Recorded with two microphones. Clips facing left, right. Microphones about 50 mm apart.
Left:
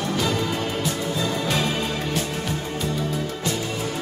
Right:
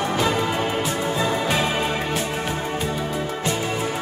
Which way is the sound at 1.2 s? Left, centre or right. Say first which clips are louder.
Right 2 dB; centre.